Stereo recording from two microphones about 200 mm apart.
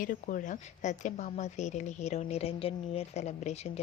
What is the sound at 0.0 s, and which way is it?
A woman's voice, 40° left (ahead or behind).